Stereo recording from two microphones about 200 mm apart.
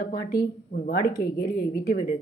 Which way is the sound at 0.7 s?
35° left (ahead or behind).